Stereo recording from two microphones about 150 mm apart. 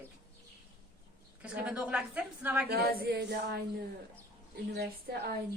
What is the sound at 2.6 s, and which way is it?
Speech, 90° right.